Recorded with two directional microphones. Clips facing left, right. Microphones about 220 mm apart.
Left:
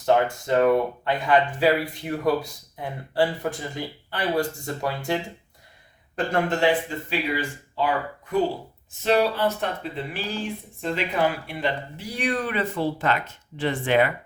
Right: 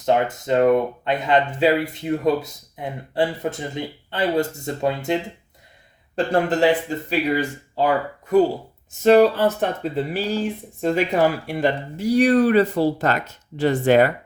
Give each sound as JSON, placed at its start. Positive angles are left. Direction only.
{"t": 0.0, "sound": "speech", "side_deg": -20}
{"t": 6.1, "sound": "speech", "side_deg": -35}